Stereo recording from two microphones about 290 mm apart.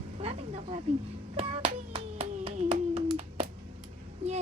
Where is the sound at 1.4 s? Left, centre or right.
Centre.